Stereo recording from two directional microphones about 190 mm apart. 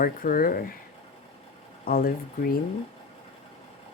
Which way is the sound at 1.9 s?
50° left (ahead or behind).